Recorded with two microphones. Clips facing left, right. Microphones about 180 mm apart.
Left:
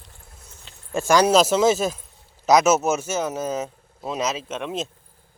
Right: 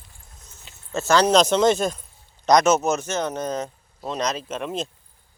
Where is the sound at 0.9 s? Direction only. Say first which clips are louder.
Left 1 dB; 10° left (ahead or behind).